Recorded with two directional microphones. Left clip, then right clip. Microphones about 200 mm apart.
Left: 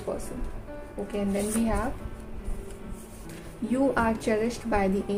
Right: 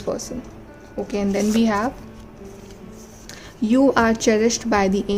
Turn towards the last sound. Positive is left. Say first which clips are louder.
# right 7 dB
turn(degrees=-45)  # may be behind; listen again after turning